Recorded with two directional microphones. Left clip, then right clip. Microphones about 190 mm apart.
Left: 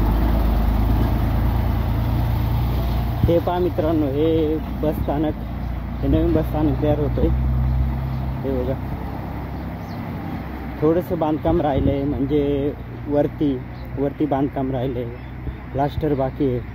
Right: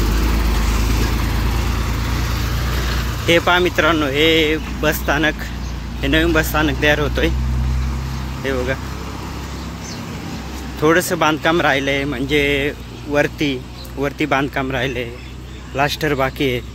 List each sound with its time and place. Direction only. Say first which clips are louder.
3.3 s speech: right 6 dB; 25° right (ahead or behind)
10.8 s speech: right 5 dB; 30° right (ahead or behind)